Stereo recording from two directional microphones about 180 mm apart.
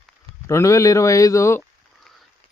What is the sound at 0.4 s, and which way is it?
A man's voice, 15° left (ahead or behind).